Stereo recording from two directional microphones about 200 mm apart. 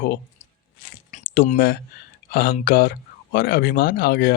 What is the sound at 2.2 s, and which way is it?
Speech, 50° left (ahead or behind).